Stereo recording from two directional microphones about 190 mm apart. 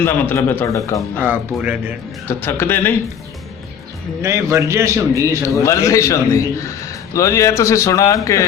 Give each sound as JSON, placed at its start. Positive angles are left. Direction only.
{"t": 0.0, "sound": "a man's voice", "side_deg": 10}
{"t": 1.2, "sound": "a man's voice", "side_deg": -10}
{"t": 2.2, "sound": "a man's voice", "side_deg": 10}
{"t": 4.2, "sound": "a man's voice", "side_deg": -15}
{"t": 5.6, "sound": "a man's voice", "side_deg": 15}